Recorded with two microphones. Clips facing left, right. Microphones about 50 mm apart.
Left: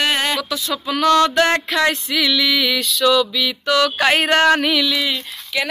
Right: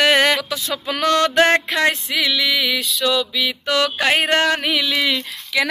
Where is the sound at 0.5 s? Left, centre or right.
Right.